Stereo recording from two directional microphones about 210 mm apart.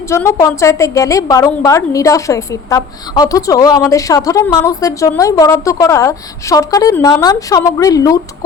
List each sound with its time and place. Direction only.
0.1 s a woman's voice: 15° left (ahead or behind)